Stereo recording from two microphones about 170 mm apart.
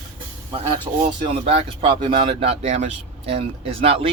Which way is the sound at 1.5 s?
35° right (ahead or behind).